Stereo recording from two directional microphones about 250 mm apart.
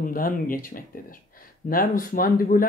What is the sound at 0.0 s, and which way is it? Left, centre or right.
Speech, left.